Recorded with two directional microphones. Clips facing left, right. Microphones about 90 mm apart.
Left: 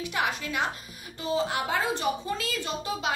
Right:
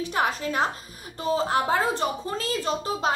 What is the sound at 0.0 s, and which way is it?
A woman's voice, 35° right (ahead or behind).